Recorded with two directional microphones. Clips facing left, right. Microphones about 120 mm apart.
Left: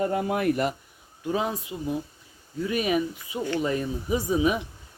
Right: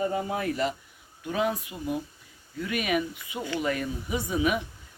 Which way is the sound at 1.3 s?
30° left (ahead or behind).